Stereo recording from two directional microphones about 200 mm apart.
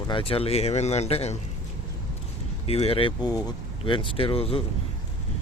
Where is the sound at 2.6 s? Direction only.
30° left (ahead or behind).